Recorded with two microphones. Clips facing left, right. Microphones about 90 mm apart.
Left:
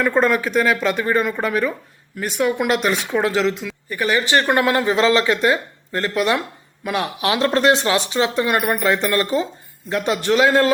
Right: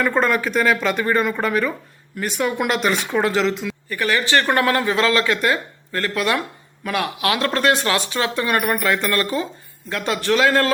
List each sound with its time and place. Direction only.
0.0 s speech: 5° left (ahead or behind)
3.8 s speech: 20° left (ahead or behind)